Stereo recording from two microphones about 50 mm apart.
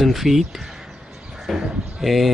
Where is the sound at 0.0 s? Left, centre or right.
Centre.